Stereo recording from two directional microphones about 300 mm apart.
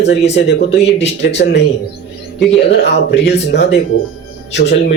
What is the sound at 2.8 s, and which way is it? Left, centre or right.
Speech, left.